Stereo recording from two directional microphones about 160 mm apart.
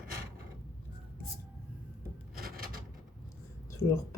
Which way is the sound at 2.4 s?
65° right (ahead or behind).